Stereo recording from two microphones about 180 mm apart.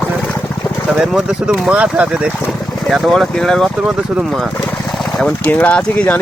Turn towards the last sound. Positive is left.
turn(degrees=10)  # may be behind; listen again after turning